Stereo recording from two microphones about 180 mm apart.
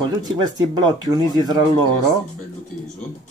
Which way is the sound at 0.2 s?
25° right (ahead or behind).